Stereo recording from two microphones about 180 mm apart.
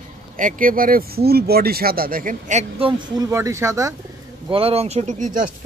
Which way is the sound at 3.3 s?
15° right (ahead or behind).